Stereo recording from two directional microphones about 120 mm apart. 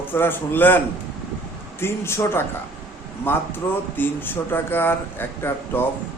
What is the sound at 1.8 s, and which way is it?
A man's voice, 20° left (ahead or behind).